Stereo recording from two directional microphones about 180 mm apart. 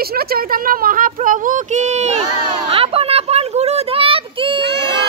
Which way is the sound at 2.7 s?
30° right (ahead or behind).